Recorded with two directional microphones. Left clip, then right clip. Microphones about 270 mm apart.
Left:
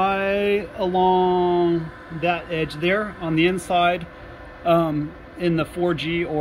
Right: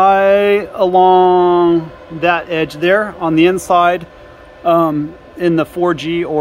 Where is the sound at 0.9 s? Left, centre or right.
Right.